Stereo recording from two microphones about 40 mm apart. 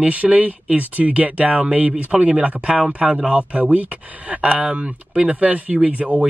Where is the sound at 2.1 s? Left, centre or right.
Right.